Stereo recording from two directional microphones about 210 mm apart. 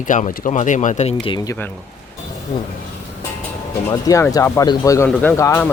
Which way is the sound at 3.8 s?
15° left (ahead or behind).